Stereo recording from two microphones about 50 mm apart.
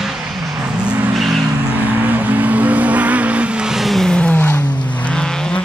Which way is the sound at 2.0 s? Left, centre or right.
Right.